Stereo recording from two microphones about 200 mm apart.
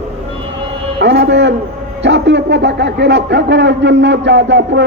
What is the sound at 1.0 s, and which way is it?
A man's voice, 60° right (ahead or behind).